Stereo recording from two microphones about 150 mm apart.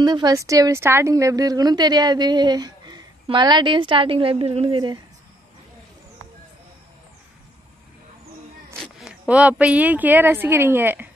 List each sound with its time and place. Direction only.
0.0 s a woman's voice: 30° right (ahead or behind)
9.0 s speech: 5° right (ahead or behind)